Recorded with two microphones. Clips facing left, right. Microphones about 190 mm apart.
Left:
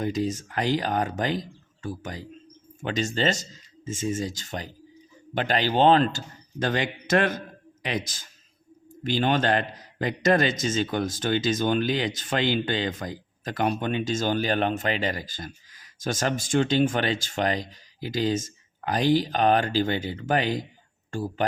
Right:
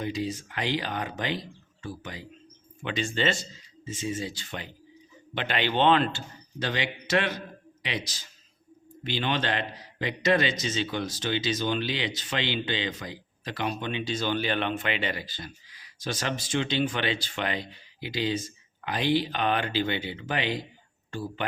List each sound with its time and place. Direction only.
0.0 s a man's voice: 45° left (ahead or behind)